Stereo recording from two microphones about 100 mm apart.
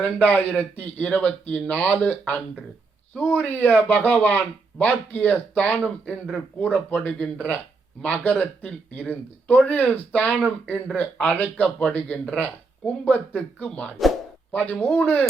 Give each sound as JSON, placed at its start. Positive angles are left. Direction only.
{"t": 0.0, "sound": "speech", "side_deg": 15}